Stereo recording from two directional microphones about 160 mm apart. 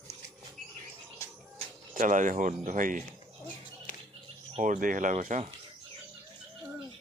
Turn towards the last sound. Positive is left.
turn(degrees=-50)  # may be behind; listen again after turning